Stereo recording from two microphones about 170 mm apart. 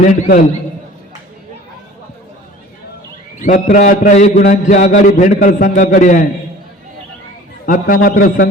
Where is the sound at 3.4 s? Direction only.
50° left (ahead or behind).